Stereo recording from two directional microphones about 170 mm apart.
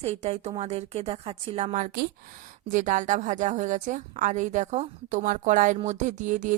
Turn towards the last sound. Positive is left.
turn(degrees=-45)  # may be behind; listen again after turning